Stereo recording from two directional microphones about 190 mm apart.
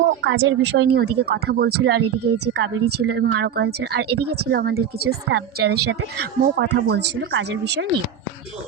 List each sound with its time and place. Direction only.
0.1 s speech: 75° right (ahead or behind)